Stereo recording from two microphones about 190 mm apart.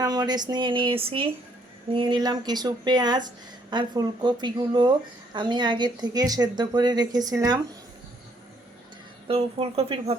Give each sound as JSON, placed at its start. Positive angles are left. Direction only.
{"t": 0.0, "sound": "speech", "side_deg": -20}
{"t": 9.2, "sound": "speech", "side_deg": -30}